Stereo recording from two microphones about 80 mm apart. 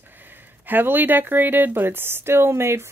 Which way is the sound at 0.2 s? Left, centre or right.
Right.